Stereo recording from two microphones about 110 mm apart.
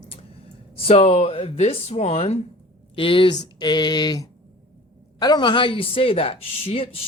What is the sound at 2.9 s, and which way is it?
Speech, 55° left (ahead or behind).